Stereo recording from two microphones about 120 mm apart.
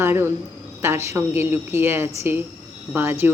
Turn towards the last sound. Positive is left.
turn(degrees=-15)  # may be behind; listen again after turning